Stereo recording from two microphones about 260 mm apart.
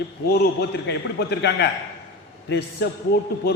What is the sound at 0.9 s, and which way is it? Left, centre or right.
Speech, left.